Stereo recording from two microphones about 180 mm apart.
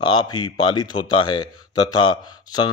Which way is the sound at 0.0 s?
25° left (ahead or behind).